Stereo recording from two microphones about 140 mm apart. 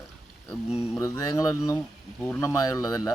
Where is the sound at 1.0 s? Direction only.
25° left (ahead or behind).